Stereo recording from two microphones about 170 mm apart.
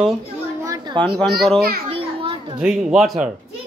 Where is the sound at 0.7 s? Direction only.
25° right (ahead or behind).